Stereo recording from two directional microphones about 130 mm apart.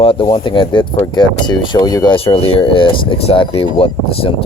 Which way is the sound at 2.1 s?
45° left (ahead or behind).